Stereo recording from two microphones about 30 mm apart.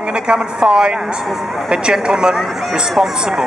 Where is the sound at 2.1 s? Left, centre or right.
Centre.